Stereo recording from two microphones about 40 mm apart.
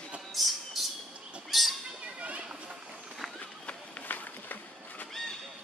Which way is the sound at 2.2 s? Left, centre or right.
Right.